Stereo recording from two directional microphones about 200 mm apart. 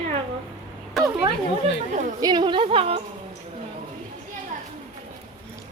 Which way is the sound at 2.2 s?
20° right (ahead or behind).